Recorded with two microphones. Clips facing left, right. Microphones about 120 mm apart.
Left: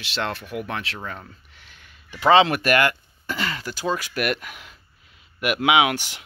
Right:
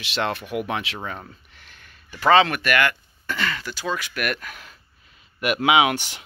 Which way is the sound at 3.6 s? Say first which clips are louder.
Left 2 dB; 40° left (ahead or behind).